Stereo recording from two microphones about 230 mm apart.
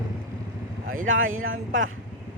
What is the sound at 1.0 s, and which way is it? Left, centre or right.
Speech, right.